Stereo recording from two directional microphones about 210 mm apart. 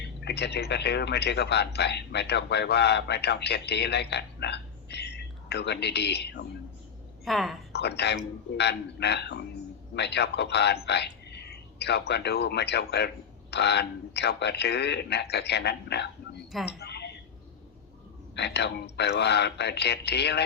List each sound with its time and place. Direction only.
0.3 s speech: 50° left (ahead or behind)
7.3 s speech: centre (ahead or behind)
7.7 s a man's voice: 50° left (ahead or behind)
16.6 s a sound: 50° left (ahead or behind)
18.3 s speech: 55° left (ahead or behind)